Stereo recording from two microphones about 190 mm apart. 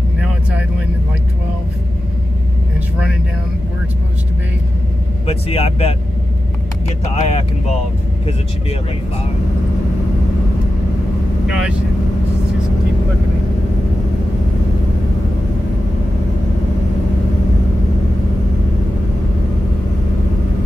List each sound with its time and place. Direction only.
5.2 s speech: 30° left (ahead or behind)
7.1 s speech: 35° left (ahead or behind)
11.4 s speech: 5° right (ahead or behind)